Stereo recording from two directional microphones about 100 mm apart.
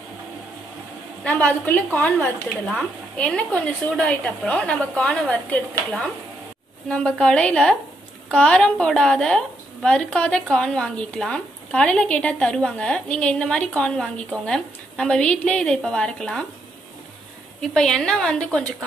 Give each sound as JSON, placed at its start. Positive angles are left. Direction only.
{"t": 1.2, "sound": "a woman's voice", "side_deg": 15}
{"t": 6.9, "sound": "a woman's voice", "side_deg": 10}
{"t": 17.6, "sound": "a woman's voice", "side_deg": 5}